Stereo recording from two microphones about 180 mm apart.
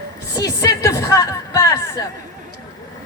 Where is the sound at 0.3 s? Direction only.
20° left (ahead or behind).